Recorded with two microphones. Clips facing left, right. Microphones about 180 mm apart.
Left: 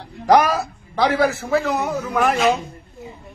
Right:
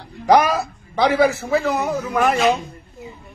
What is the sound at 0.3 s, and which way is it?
A man's voice, centre (ahead or behind).